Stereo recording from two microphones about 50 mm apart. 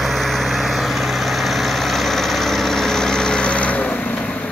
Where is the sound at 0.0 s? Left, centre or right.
Centre; by 4.0 s left.